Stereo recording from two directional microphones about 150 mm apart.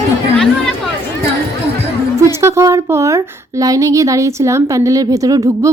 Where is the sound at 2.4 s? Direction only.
20° right (ahead or behind).